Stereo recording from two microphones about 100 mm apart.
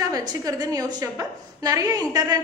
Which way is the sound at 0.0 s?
40° right (ahead or behind).